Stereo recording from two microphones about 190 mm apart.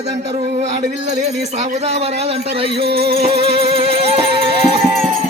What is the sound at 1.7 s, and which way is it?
Speech, 35° right (ahead or behind).